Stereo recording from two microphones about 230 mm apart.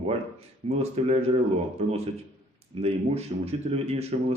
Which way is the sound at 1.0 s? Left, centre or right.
Right.